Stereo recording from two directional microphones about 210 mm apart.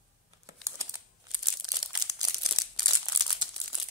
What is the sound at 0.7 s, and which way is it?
Crumpling, 15° right (ahead or behind).